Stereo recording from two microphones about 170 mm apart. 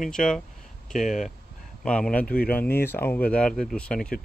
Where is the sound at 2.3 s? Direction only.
60° left (ahead or behind).